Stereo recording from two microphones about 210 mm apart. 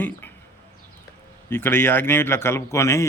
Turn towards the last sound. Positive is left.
turn(degrees=15)  # may be behind; listen again after turning